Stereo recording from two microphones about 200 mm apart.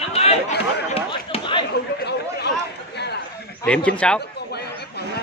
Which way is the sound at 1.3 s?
25° left (ahead or behind).